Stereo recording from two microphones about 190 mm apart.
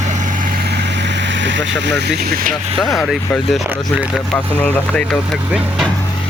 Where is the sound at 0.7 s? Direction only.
65° right (ahead or behind).